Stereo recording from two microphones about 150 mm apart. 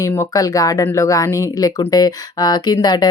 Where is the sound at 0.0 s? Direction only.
20° left (ahead or behind).